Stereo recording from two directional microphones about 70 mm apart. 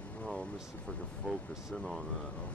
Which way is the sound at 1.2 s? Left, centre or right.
Centre.